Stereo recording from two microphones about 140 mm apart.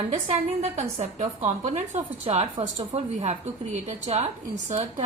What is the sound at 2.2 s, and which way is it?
A woman's voice, 50° right (ahead or behind).